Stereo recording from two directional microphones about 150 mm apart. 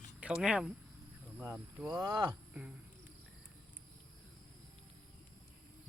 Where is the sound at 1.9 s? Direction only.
20° right (ahead or behind).